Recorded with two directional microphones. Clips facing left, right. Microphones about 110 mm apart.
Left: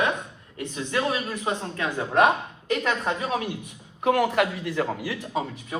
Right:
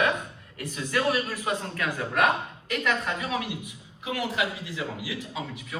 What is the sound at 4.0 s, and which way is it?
Speech, 55° left (ahead or behind).